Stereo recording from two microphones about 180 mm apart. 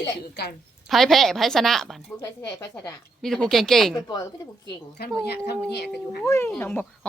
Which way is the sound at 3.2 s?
5° left (ahead or behind).